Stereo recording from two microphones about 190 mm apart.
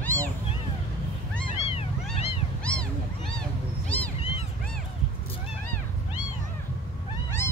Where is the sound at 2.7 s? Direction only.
5° left (ahead or behind).